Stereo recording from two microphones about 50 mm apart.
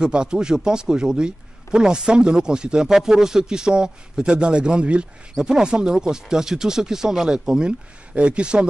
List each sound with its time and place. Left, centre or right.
0.0 s a man's voice: centre